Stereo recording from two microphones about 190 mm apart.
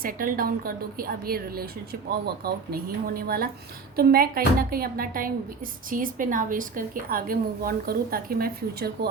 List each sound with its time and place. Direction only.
0.0 s a woman's voice: 50° right (ahead or behind)